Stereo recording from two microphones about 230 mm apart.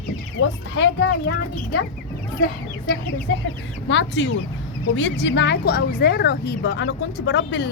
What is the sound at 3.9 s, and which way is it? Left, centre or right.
A woman's voice, left.